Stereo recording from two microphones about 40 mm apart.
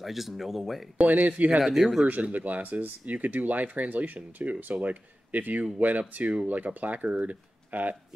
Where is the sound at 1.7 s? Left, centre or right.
Centre.